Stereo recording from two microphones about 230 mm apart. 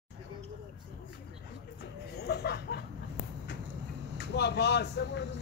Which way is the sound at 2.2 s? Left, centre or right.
Left.